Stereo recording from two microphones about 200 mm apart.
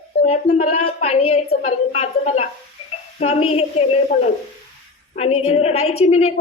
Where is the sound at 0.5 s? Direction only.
30° left (ahead or behind).